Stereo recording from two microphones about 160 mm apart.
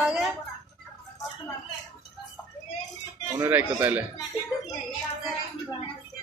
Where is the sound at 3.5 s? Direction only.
10° right (ahead or behind).